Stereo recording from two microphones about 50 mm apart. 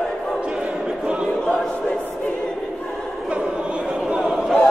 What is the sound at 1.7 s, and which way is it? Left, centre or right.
Choir, left.